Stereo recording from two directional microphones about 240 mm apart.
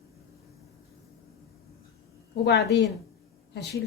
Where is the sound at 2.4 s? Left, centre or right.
Left.